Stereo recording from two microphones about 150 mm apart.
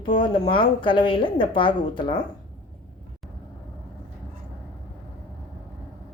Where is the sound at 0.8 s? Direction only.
35° left (ahead or behind).